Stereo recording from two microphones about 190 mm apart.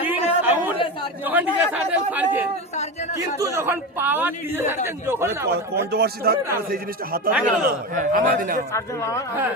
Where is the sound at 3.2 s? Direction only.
15° right (ahead or behind).